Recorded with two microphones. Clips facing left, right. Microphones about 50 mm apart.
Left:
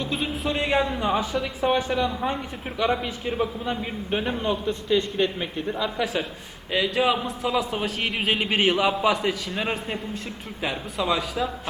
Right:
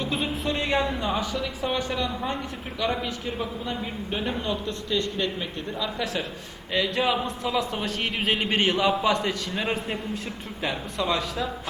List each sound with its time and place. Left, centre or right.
0.0 s speech: centre
1.0 s a man's voice: centre